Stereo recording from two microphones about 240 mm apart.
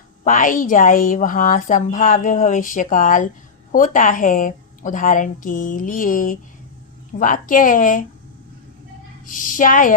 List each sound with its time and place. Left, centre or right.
0.3 s a woman's voice: left
9.2 s a woman's voice: left